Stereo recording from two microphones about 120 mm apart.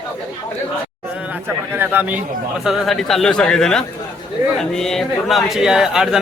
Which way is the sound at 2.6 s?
Centre (ahead or behind).